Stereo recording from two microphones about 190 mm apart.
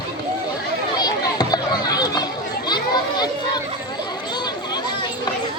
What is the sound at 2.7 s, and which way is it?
Children playing, 20° left (ahead or behind).